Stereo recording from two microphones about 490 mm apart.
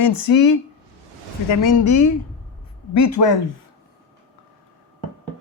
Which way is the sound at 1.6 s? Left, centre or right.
Left.